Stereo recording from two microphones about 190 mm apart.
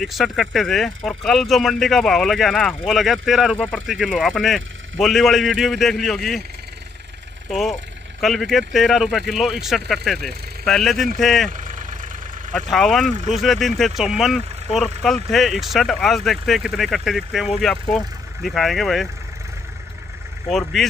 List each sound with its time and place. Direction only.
0.0 s speech: centre (ahead or behind)
8.2 s speech: centre (ahead or behind)
11.5 s vehicle: 40° right (ahead or behind)
12.5 s speech: centre (ahead or behind)
20.4 s speech: centre (ahead or behind)